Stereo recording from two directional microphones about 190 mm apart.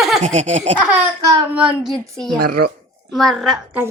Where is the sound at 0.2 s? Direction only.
40° right (ahead or behind).